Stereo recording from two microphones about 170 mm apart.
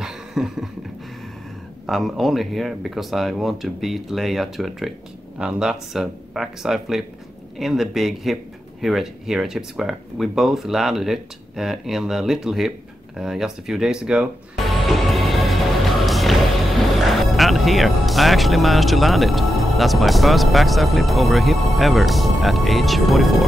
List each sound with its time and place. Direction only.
0.0 s a sound: centre (ahead or behind)
1.9 s speech: centre (ahead or behind)
14.9 s music: centre (ahead or behind)